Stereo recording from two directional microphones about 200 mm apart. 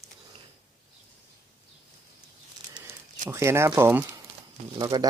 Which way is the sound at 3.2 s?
15° right (ahead or behind).